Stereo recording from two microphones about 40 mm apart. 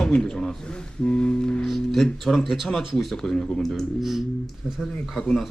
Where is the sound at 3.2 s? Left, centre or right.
Centre.